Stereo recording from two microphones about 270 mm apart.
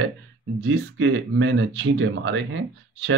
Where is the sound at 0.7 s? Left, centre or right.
Right.